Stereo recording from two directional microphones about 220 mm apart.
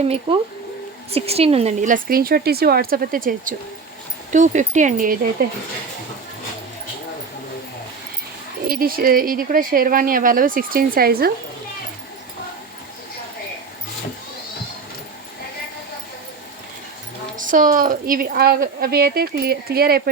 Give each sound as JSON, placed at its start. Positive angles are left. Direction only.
{"t": 0.0, "sound": "speech", "side_deg": -25}
{"t": 8.6, "sound": "speech", "side_deg": -40}
{"t": 17.3, "sound": "a woman's voice", "side_deg": -35}